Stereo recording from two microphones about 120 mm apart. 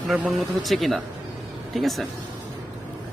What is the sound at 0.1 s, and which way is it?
A man's voice, centre (ahead or behind).